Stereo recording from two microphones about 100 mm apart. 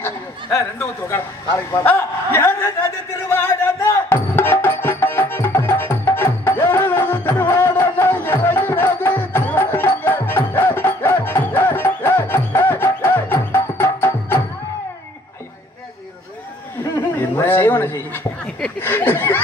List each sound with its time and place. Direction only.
0.6 s a man's voice: 30° left (ahead or behind)
3.3 s music: 25° left (ahead or behind)
17.4 s a sound: 20° left (ahead or behind)